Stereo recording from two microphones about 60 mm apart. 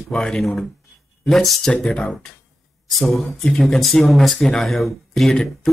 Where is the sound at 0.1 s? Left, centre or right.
Centre.